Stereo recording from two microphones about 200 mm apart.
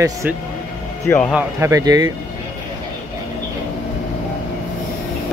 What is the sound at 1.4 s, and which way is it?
Speech, 15° right (ahead or behind).